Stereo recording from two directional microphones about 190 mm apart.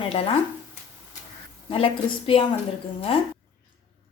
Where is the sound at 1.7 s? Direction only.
30° left (ahead or behind).